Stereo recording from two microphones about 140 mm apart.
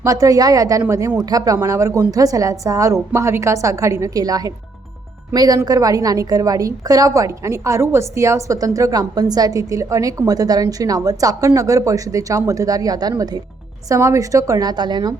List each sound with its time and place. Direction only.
0.0 s a woman's voice: 25° right (ahead or behind)